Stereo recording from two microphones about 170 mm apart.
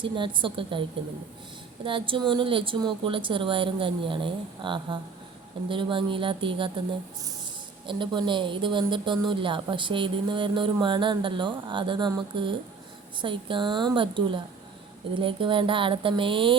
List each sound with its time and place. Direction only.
0.0 s speech: 30° right (ahead or behind)
7.9 s speech: 30° right (ahead or behind)